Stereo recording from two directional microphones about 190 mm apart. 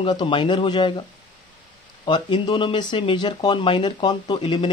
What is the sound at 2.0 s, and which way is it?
Speech, 25° left (ahead or behind).